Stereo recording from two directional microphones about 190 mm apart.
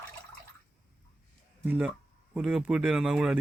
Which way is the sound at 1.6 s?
10° right (ahead or behind).